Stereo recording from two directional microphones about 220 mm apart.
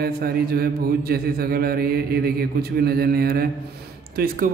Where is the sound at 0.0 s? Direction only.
45° right (ahead or behind).